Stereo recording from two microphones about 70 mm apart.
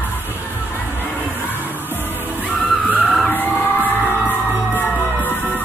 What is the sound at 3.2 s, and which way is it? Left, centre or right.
Skidding, left.